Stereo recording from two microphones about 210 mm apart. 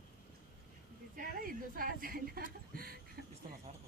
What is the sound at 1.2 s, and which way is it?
Speech, 45° right (ahead or behind).